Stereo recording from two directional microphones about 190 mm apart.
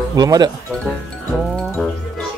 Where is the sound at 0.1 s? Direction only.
20° right (ahead or behind).